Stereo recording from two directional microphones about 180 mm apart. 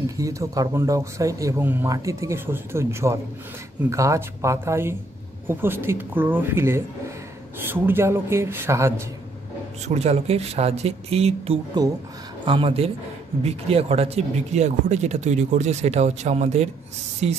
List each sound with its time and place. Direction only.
0.0 s speech: 20° right (ahead or behind)
9.8 s speech: 35° right (ahead or behind)